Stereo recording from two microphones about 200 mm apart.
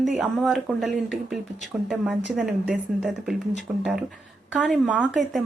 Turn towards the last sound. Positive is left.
turn(degrees=-5)  # may be behind; listen again after turning